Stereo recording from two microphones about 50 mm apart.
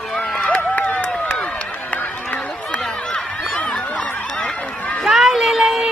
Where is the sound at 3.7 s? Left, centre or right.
Left.